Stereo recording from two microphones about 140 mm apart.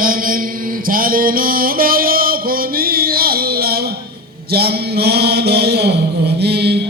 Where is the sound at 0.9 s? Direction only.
90° right.